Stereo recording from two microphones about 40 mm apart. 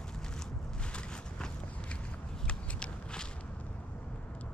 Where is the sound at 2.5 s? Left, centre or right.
Left.